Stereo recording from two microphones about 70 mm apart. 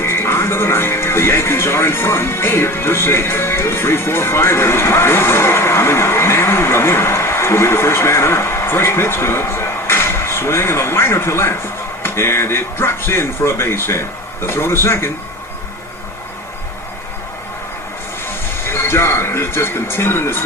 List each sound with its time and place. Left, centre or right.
0.0 s speech: left
18.6 s speech: left